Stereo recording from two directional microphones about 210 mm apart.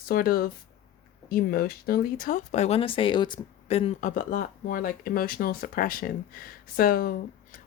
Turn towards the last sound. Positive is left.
turn(degrees=45)  # may be behind; listen again after turning